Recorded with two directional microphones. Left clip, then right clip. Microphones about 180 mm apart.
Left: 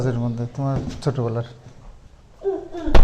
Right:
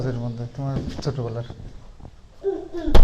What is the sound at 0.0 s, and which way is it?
Speech, 55° left (ahead or behind).